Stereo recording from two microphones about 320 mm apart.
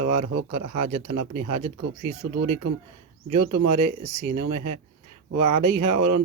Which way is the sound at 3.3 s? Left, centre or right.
Right.